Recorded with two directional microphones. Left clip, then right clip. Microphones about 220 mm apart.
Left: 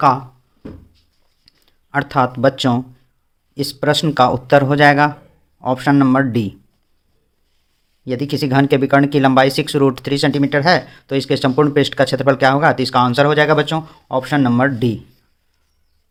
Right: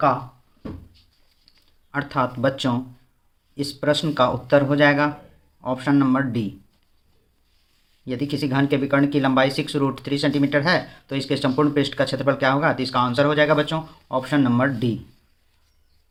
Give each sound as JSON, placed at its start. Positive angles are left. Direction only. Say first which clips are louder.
{"t": 1.5, "sound": "speech", "louder": "left 7 dB", "side_deg": 45}
{"t": 8.0, "sound": "speech", "louder": "left 6 dB", "side_deg": 40}